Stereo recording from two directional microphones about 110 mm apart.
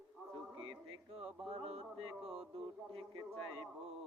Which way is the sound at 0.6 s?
55° right (ahead or behind).